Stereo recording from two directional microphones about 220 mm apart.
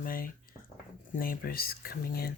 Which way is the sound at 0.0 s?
40° left (ahead or behind).